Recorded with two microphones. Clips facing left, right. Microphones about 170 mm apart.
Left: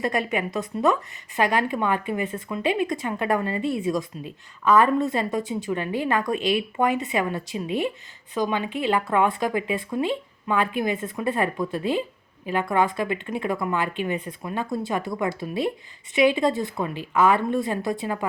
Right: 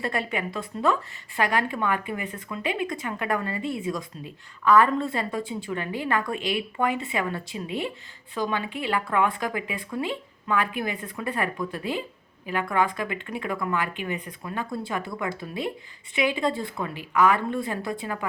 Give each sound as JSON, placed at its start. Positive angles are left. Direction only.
{"t": 0.0, "sound": "a woman's voice", "side_deg": 20}